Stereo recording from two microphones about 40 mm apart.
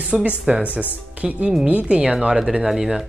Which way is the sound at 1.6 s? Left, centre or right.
Right.